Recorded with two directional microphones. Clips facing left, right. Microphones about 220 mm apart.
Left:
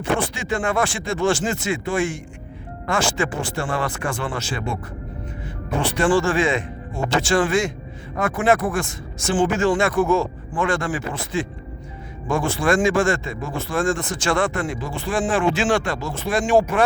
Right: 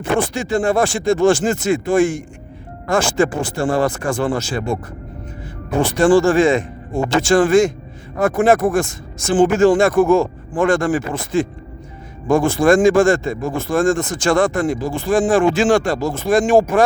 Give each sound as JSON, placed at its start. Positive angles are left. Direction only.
{"t": 0.2, "sound": "speech", "side_deg": -40}
{"t": 5.8, "sound": "speech", "side_deg": -45}